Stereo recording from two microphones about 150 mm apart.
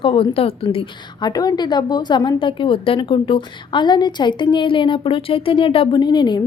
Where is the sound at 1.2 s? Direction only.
25° left (ahead or behind).